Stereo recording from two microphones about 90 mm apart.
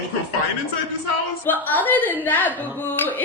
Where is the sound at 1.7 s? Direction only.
20° left (ahead or behind).